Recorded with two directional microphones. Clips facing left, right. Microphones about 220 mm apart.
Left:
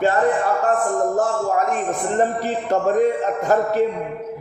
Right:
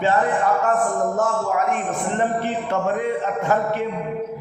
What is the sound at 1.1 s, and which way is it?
A man's voice, 35° left (ahead or behind).